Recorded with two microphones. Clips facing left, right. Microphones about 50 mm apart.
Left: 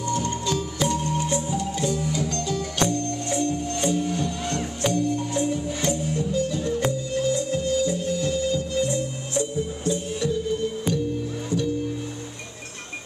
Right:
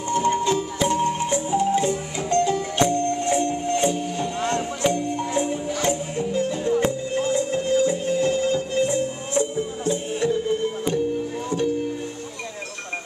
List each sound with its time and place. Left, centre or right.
0.1 s music: right